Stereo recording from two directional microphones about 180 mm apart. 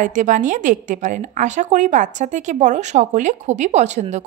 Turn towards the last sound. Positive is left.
turn(degrees=-40)  # may be behind; listen again after turning